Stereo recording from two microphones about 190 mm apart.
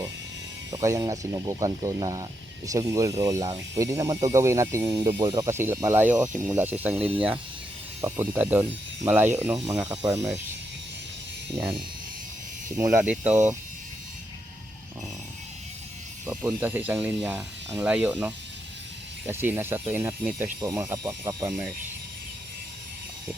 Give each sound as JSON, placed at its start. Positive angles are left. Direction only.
{"t": 0.7, "sound": "speech", "side_deg": -20}
{"t": 6.9, "sound": "speech", "side_deg": -30}
{"t": 8.0, "sound": "speech", "side_deg": -10}
{"t": 11.5, "sound": "speech", "side_deg": -20}
{"t": 16.2, "sound": "speech", "side_deg": -10}